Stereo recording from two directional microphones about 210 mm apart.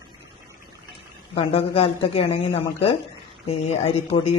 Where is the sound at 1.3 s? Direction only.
25° left (ahead or behind).